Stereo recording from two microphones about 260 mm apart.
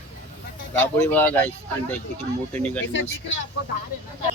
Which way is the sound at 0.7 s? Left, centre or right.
Centre.